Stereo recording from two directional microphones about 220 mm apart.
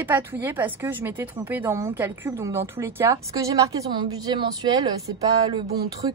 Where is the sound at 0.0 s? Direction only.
10° right (ahead or behind).